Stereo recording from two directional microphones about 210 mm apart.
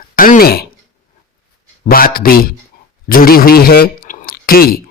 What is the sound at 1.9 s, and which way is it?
Speech, 45° left (ahead or behind).